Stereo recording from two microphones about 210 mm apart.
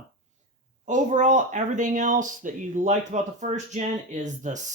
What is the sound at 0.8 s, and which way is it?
Speech, 35° right (ahead or behind).